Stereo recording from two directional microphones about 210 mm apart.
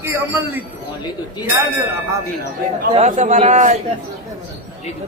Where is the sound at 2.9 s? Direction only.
35° right (ahead or behind).